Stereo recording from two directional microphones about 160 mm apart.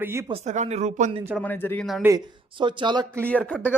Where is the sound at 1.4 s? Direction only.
15° left (ahead or behind).